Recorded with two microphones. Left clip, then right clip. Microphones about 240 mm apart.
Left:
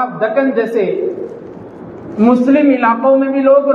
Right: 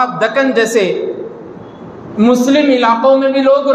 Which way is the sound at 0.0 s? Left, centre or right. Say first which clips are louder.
Right 2 dB; right.